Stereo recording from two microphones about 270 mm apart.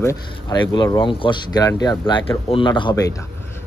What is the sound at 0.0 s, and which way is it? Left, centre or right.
Speech, centre.